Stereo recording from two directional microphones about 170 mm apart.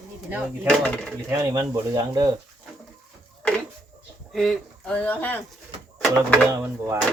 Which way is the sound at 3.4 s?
5° left (ahead or behind).